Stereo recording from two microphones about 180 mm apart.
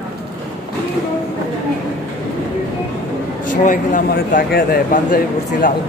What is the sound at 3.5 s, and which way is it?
Speech, 45° left (ahead or behind).